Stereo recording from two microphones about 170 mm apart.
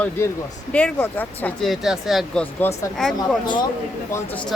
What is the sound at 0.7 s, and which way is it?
Speech, 10° left (ahead or behind).